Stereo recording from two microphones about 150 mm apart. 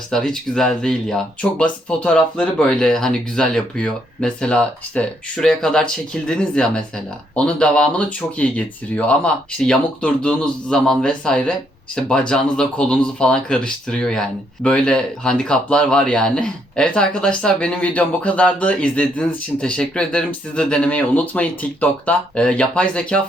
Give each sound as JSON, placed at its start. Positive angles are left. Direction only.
{"t": 0.1, "sound": "speech", "side_deg": 5}